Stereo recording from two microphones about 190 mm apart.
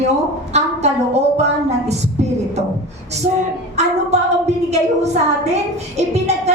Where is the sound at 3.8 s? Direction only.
35° right (ahead or behind).